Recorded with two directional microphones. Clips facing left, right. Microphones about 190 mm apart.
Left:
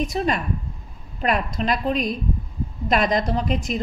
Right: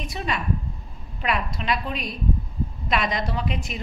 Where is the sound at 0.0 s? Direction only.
45° left (ahead or behind).